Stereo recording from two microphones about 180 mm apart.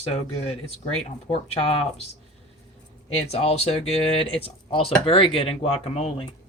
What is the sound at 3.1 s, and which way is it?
Speech, 35° left (ahead or behind).